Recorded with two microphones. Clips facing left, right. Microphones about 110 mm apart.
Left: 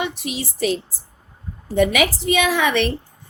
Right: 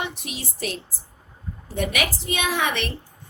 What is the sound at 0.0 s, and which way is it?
Speech, 90° left.